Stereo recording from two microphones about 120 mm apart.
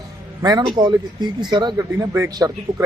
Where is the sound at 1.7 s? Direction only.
25° right (ahead or behind).